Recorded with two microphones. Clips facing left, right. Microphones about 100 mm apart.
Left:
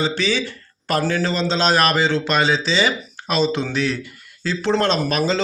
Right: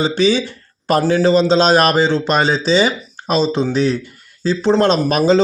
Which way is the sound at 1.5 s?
45° right (ahead or behind).